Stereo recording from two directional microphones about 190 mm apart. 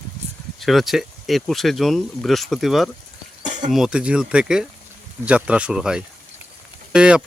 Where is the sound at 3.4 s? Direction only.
40° right (ahead or behind).